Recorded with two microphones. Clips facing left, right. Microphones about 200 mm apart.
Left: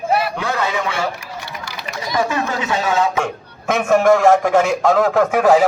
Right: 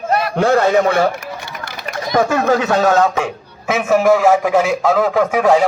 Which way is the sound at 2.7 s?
45° right (ahead or behind).